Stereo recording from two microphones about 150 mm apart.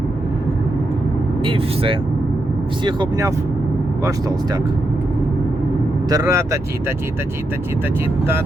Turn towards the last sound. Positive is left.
turn(degrees=-20)  # may be behind; listen again after turning